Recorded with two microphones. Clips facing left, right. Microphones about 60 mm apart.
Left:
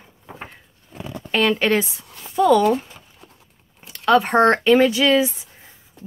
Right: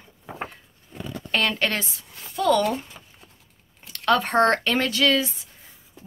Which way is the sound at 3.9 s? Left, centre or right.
Centre.